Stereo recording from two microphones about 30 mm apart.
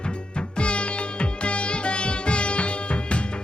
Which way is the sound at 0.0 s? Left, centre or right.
Left.